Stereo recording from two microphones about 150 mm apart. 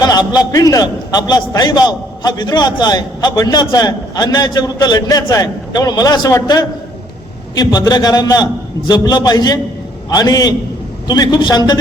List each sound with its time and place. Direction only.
0.0 s a man's voice: 25° left (ahead or behind)